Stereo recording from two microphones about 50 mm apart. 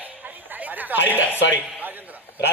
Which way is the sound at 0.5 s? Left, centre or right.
Right.